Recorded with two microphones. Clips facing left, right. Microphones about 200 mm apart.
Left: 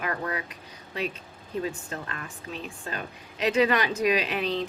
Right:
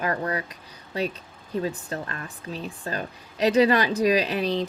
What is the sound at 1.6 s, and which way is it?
Speech, 35° right (ahead or behind).